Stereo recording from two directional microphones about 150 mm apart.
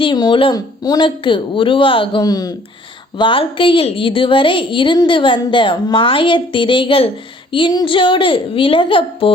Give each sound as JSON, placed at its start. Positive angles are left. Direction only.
{"t": 0.0, "sound": "a woman's voice", "side_deg": 30}